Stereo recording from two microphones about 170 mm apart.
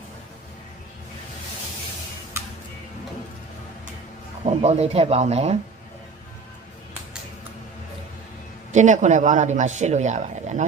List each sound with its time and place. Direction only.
4.4 s speech: 40° right (ahead or behind)
8.7 s speech: 45° right (ahead or behind)